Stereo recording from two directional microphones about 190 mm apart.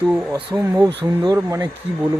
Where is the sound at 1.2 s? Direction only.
15° right (ahead or behind).